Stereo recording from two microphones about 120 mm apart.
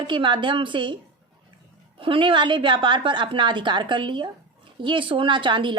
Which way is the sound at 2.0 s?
45° right (ahead or behind).